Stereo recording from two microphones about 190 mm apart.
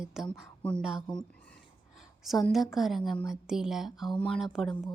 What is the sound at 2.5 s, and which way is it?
Speech, centre (ahead or behind).